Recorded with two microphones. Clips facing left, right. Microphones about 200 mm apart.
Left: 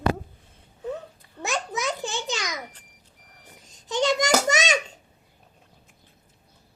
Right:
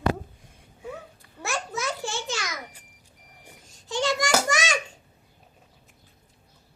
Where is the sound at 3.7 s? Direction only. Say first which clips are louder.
Left 3 dB; 20° left (ahead or behind).